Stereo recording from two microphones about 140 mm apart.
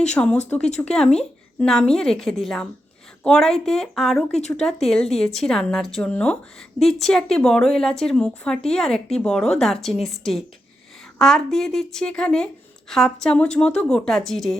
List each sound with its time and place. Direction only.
0.1 s a woman's voice: 10° left (ahead or behind)
4.4 s speech: 55° left (ahead or behind)
4.6 s a woman's voice: 5° left (ahead or behind)